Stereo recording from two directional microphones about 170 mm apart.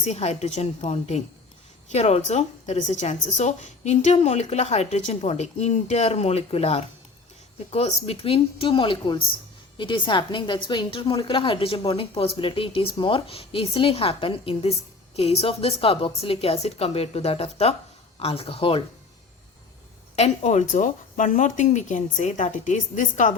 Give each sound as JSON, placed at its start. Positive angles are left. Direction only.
{"t": 0.0, "sound": "a woman's voice", "side_deg": 40}
{"t": 20.1, "sound": "speech", "side_deg": 40}